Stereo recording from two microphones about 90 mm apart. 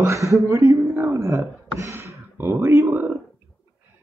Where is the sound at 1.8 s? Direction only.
35° right (ahead or behind).